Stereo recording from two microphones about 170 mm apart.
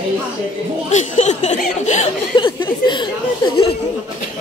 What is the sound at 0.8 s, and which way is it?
Speech, 45° left (ahead or behind).